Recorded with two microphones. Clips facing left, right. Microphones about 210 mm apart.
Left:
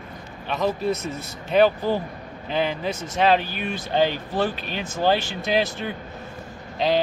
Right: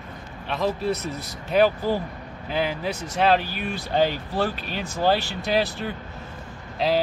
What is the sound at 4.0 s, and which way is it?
A man's voice, 5° right (ahead or behind).